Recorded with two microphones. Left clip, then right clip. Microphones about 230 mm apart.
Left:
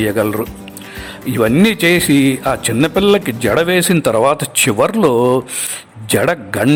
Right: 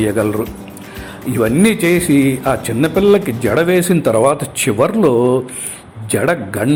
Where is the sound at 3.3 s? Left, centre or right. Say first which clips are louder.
Left 1 dB; left.